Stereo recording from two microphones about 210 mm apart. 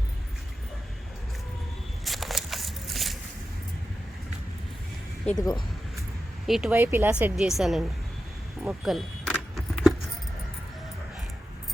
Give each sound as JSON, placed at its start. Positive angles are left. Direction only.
{"t": 2.0, "sound": "a sound", "side_deg": 0}
{"t": 5.4, "sound": "speech", "side_deg": 15}
{"t": 6.4, "sound": "speech", "side_deg": -5}
{"t": 8.6, "sound": "keys jangling", "side_deg": 0}